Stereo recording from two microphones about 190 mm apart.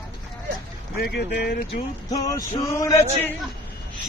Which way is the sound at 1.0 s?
60° left (ahead or behind).